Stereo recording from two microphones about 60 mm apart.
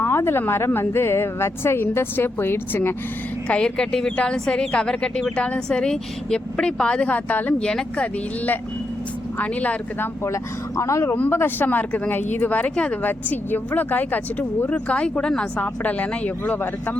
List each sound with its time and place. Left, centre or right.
0.0 s speech: left
3.5 s speech: centre; by 7.5 s left
7.6 s speech: centre
9.4 s speech: left
10.8 s speech: left
11.1 s speech: left